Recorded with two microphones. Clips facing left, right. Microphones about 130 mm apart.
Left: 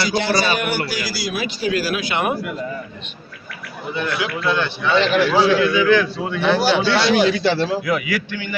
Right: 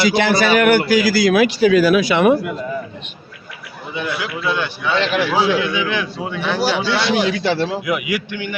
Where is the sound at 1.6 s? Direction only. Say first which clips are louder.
Right 7 dB; 70° right (ahead or behind).